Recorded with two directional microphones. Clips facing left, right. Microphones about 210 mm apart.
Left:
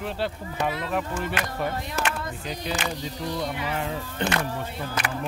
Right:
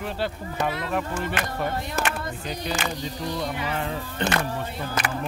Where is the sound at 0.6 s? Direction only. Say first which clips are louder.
Even; 5° left (ahead or behind).